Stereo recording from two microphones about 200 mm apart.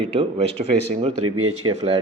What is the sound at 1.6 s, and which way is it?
Speech, 20° right (ahead or behind).